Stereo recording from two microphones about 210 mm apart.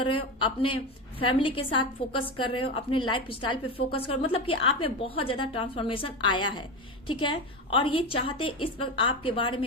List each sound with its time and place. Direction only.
0.0 s a woman's voice: 25° left (ahead or behind)